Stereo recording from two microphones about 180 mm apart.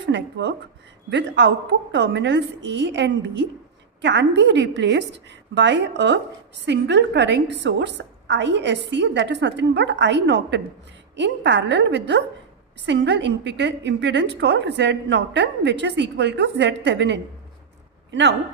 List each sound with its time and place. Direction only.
0.0 s a woman's voice: 75° right (ahead or behind)